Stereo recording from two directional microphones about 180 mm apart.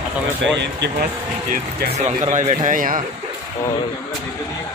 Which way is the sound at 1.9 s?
40° right (ahead or behind).